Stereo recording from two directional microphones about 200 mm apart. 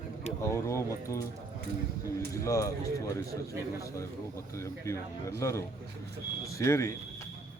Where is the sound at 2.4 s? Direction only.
15° left (ahead or behind).